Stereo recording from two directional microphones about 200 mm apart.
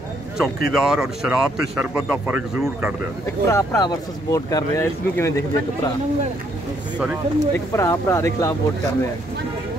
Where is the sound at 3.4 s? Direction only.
15° left (ahead or behind).